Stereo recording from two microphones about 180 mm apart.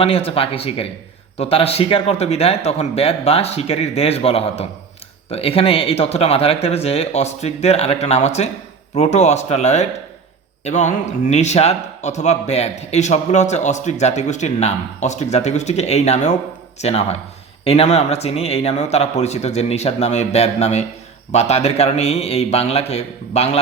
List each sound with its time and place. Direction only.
0.0 s speech: 35° left (ahead or behind)